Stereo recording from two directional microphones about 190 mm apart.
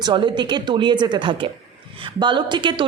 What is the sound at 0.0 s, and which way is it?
A woman's voice, 25° right (ahead or behind).